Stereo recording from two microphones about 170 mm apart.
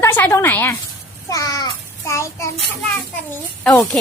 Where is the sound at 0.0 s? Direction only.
15° left (ahead or behind).